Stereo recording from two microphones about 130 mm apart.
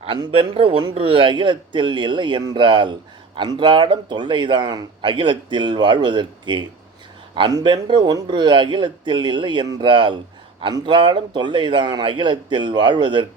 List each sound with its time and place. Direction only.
0.0 s speech: 45° right (ahead or behind)